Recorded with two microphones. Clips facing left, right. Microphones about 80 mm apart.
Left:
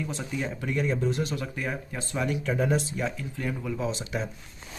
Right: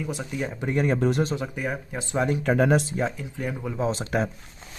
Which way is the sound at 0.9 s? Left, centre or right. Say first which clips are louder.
Right 5 dB; right.